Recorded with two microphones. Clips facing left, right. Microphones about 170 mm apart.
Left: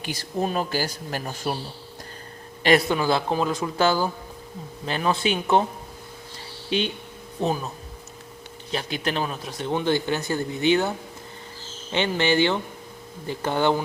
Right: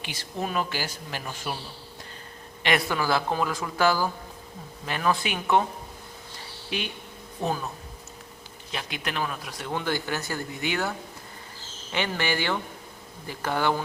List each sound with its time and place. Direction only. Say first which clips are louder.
0.0 s a man's voice: left 6 dB; 40° left (ahead or behind)
2.9 s speech: left 3 dB; 20° left (ahead or behind)
6.7 s speech: left 7 dB; 25° left (ahead or behind)
8.7 s speech: left 6 dB; 30° left (ahead or behind)